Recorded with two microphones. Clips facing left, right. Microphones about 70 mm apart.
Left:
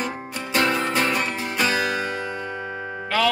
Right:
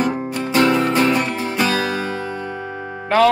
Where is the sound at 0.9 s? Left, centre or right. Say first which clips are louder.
Right 6 dB; right.